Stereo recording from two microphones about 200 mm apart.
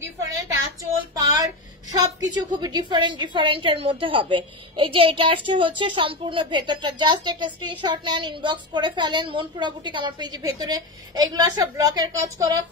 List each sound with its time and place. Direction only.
1.1 s a woman's voice: 20° right (ahead or behind)